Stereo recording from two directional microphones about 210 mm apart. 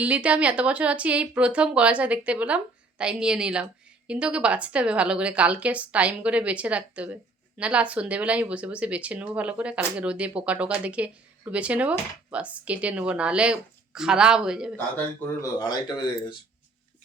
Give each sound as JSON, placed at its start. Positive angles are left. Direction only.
{"t": 0.0, "sound": "a woman's voice", "side_deg": -5}
{"t": 15.4, "sound": "speech", "side_deg": 20}